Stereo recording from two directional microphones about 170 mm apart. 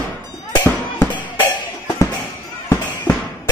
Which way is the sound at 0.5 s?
25° left (ahead or behind).